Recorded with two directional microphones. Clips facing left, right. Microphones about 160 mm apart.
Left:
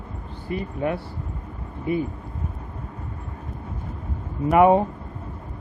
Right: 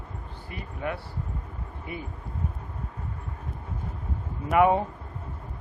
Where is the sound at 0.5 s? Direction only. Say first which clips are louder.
Left 8 dB; 30° left (ahead or behind).